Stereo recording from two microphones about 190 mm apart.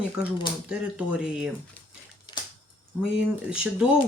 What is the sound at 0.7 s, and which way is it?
Speech, 5° right (ahead or behind).